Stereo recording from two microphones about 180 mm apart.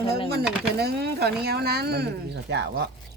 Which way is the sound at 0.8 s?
65° right (ahead or behind).